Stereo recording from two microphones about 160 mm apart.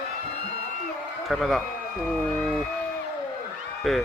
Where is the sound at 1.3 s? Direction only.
Centre (ahead or behind).